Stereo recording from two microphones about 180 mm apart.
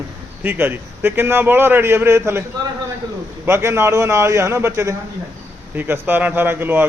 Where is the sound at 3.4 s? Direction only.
15° right (ahead or behind).